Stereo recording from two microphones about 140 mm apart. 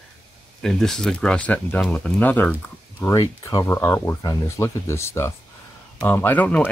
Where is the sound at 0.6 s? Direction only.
5° left (ahead or behind).